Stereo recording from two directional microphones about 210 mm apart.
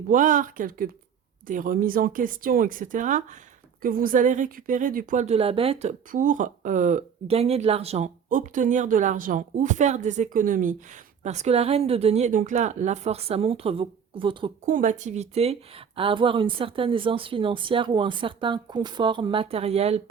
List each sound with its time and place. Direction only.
0.1 s a woman's voice: 40° right (ahead or behind)
14.7 s a woman's voice: 40° right (ahead or behind)